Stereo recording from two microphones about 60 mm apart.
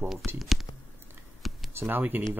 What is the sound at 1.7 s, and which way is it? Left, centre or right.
Speech, right.